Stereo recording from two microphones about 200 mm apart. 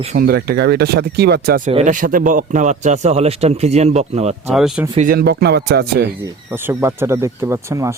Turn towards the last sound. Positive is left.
turn(degrees=-15)  # may be behind; listen again after turning